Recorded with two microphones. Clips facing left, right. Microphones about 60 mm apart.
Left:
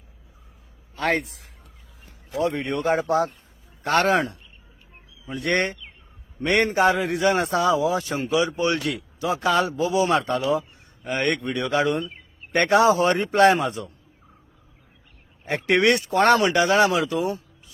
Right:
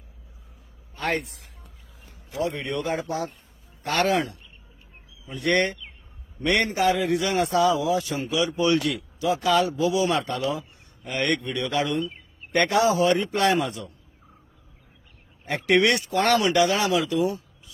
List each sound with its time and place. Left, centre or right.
2.9 s a man's voice: left
15.4 s a man's voice: left